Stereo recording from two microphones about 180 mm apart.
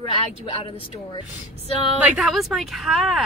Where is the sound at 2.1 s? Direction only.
Centre (ahead or behind).